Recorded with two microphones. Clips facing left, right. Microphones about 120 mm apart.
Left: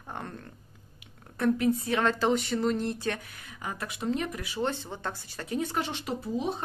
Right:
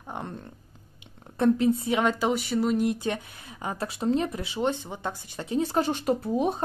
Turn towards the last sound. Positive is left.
turn(degrees=-55)  # may be behind; listen again after turning